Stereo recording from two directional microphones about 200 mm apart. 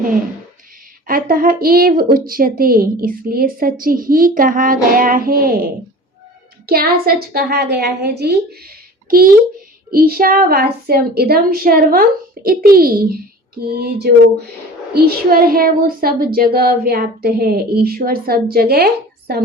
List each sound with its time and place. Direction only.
1.0 s a woman's voice: 45° right (ahead or behind)